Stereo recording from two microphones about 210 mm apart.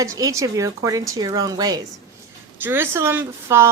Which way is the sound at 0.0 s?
15° right (ahead or behind).